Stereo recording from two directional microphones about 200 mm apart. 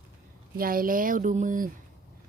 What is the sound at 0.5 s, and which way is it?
Speech, 45° right (ahead or behind).